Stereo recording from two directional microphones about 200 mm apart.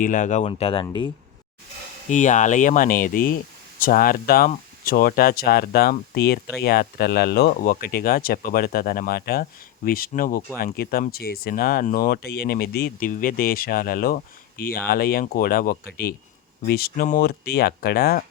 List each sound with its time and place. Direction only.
0.0 s speech: 40° left (ahead or behind); by 1.1 s 25° left (ahead or behind)
2.0 s speech: 35° left (ahead or behind)